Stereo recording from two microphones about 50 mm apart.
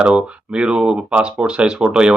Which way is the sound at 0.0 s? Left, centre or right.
Centre.